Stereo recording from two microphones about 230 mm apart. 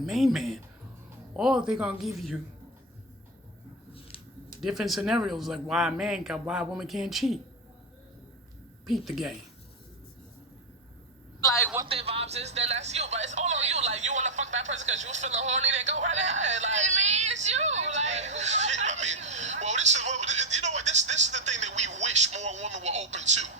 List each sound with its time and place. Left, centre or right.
0.0 s speech: centre
4.6 s speech: centre
8.9 s speech: centre
11.3 s a sound: centre
11.9 s speech: right